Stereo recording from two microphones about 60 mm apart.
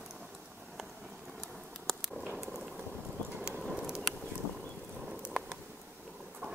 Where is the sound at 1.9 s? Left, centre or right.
Centre.